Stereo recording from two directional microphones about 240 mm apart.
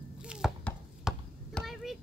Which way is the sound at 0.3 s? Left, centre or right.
Centre.